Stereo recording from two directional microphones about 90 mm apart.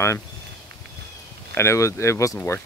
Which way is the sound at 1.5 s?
30° left (ahead or behind).